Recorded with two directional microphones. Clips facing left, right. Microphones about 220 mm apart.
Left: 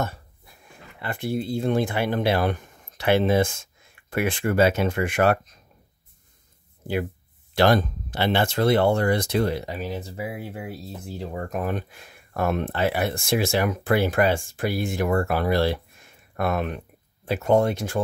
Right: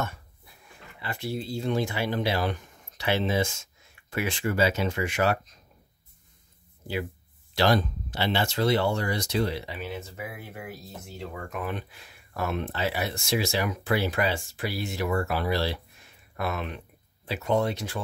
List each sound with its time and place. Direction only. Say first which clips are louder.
1.0 s speech: left 5 dB; 50° left (ahead or behind)
7.5 s speech: left 4 dB; 50° left (ahead or behind)